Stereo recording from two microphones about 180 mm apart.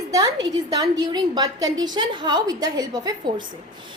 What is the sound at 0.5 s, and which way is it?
A woman's voice, 20° right (ahead or behind).